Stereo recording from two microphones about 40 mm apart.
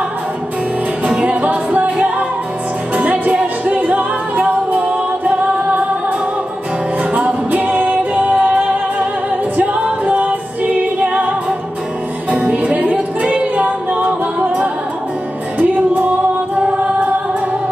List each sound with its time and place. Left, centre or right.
1.0 s music: right
9.6 s music: right